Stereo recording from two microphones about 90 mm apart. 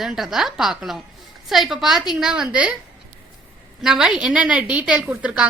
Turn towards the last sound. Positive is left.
turn(degrees=-15)  # may be behind; listen again after turning